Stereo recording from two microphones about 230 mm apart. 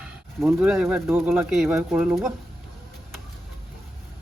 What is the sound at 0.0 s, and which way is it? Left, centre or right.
Speech, centre.